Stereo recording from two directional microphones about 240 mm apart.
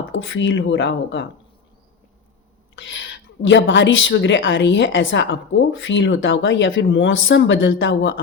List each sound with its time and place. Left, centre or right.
0.1 s a woman's voice: left
2.7 s a woman's voice: left